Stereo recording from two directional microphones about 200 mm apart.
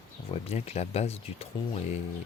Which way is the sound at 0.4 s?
35° left (ahead or behind).